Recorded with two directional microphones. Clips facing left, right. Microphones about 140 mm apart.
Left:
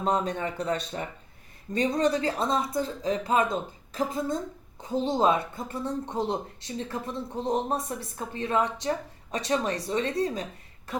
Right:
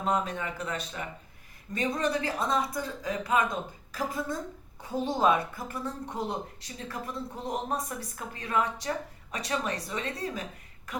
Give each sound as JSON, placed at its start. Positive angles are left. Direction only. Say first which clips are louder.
{"t": 0.0, "sound": "a woman's voice", "louder": "left 3 dB", "side_deg": 30}